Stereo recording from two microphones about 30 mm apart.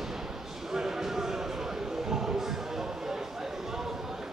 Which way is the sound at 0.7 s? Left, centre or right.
Centre.